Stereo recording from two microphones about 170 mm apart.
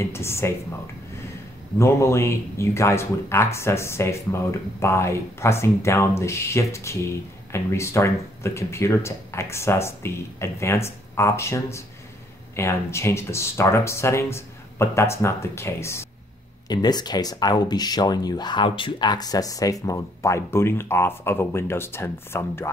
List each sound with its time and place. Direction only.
0.0 s speech: 15° left (ahead or behind)
1.8 s speech: 15° left (ahead or behind)